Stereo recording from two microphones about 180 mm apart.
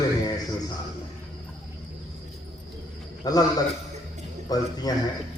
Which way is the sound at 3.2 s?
20° left (ahead or behind).